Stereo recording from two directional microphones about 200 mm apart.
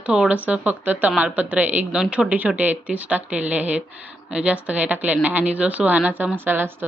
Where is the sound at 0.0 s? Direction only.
5° right (ahead or behind).